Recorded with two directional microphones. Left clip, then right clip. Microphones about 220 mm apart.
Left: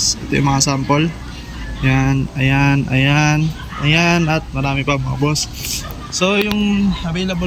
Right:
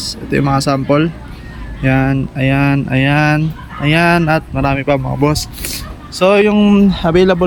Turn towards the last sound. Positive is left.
turn(degrees=-15)  # may be behind; listen again after turning